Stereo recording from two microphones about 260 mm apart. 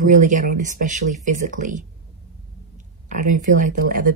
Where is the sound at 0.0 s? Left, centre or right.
Right.